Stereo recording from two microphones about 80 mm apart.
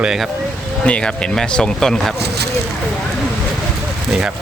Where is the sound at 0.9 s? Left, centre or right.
Centre.